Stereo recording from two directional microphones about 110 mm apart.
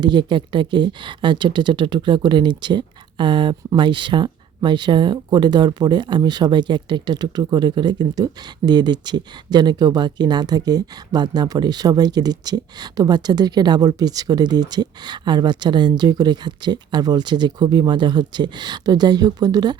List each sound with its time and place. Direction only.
0.0 s speech: 45° right (ahead or behind)